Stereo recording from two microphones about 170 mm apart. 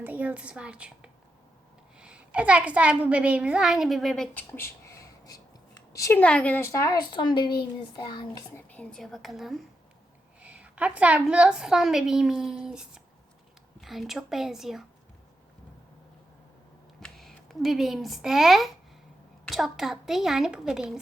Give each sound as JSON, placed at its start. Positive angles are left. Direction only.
{"t": 0.0, "sound": "a woman's voice", "side_deg": -10}
{"t": 4.5, "sound": "speech", "side_deg": 15}
{"t": 8.5, "sound": "a woman's voice", "side_deg": 5}
{"t": 17.0, "sound": "a woman's voice", "side_deg": 0}